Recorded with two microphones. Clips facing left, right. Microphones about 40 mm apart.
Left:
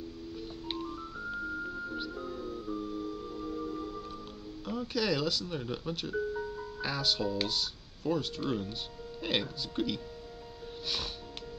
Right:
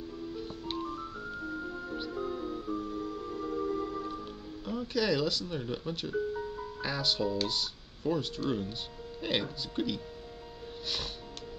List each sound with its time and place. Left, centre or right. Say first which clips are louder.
1.8 s music: even; centre
2.1 s music: right 3 dB; right
2.7 s music: left 1 dB; right
4.6 s speech: right 1 dB; centre